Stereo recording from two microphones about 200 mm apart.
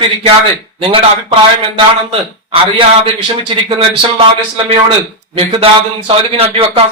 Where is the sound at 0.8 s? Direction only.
25° right (ahead or behind).